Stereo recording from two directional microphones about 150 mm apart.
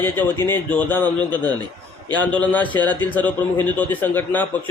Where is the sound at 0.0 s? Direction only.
15° left (ahead or behind).